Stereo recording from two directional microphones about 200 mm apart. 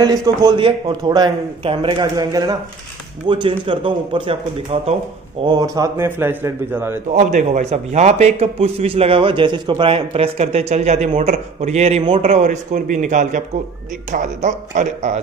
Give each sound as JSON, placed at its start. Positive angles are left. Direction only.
{"t": 0.0, "sound": "a man's voice", "side_deg": -20}
{"t": 5.4, "sound": "a man's voice", "side_deg": -20}
{"t": 7.2, "sound": "a man's voice", "side_deg": -35}
{"t": 12.3, "sound": "a man's voice", "side_deg": -40}